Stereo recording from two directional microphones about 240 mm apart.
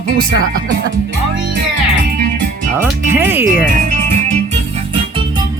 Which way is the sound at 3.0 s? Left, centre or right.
Centre.